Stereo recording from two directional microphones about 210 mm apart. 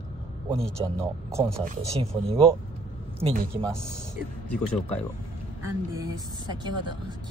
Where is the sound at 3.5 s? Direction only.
25° right (ahead or behind).